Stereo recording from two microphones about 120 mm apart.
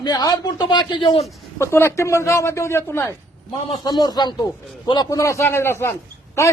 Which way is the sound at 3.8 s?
35° left (ahead or behind).